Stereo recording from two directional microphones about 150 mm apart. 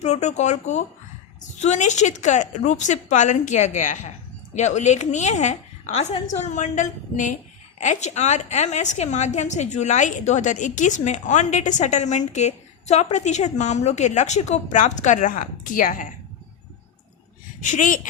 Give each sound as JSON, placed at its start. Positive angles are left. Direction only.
{"t": 0.0, "sound": "a woman's voice", "side_deg": 50}
{"t": 17.6, "sound": "speech", "side_deg": 55}